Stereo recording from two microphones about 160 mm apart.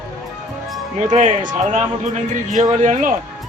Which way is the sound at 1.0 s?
50° right (ahead or behind).